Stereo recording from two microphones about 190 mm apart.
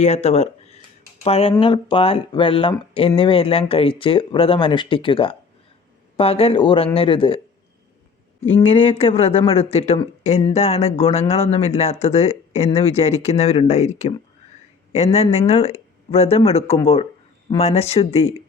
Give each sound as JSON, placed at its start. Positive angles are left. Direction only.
{"t": 0.0, "sound": "speech", "side_deg": 35}
{"t": 8.5, "sound": "speech", "side_deg": 30}